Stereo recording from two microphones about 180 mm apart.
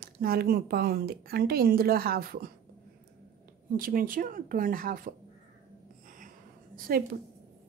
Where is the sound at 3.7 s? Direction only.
50° right (ahead or behind).